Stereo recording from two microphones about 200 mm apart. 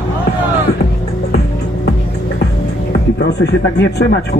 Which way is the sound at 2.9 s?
55° left (ahead or behind).